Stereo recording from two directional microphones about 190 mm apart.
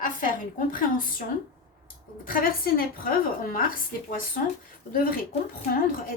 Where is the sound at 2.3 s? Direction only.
50° left (ahead or behind).